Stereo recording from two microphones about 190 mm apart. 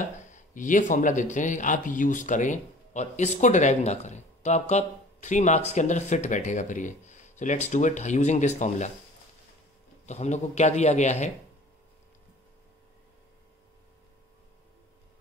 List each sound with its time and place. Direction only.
0.0 s speech: 45° left (ahead or behind)
10.0 s speech: 35° left (ahead or behind)